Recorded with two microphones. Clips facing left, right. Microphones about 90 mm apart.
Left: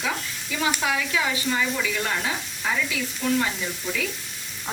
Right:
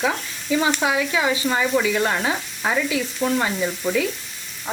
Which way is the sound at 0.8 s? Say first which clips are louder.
Right 4 dB; 25° right (ahead or behind).